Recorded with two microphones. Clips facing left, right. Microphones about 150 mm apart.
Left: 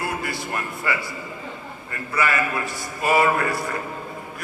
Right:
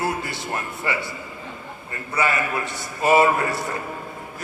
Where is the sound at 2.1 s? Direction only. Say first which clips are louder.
Even; 25° right (ahead or behind).